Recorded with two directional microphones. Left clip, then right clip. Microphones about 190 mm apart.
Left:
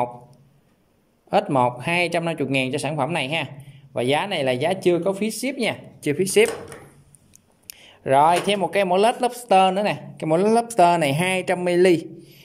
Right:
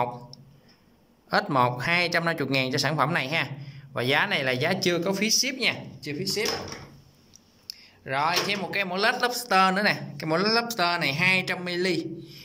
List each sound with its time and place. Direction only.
1.3 s speech: 15° left (ahead or behind)
6.0 s speech: 55° left (ahead or behind)
7.6 s a man's voice: 45° left (ahead or behind)